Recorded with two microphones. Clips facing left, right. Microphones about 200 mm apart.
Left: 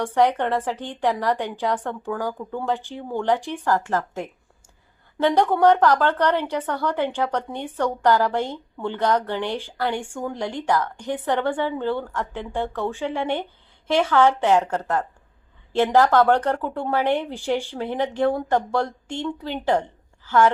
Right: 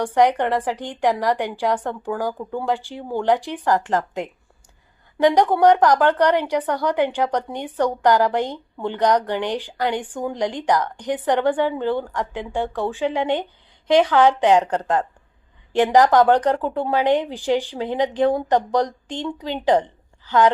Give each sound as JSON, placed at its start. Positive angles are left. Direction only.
{"t": 0.0, "sound": "a woman's voice", "side_deg": -15}